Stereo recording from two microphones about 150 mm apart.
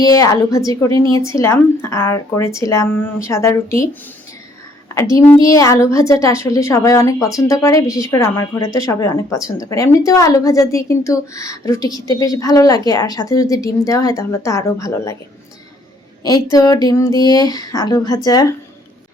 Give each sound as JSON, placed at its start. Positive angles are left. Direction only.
{"t": 0.0, "sound": "a woman's voice", "side_deg": 25}
{"t": 4.9, "sound": "a woman's voice", "side_deg": 20}
{"t": 16.2, "sound": "a woman's voice", "side_deg": 25}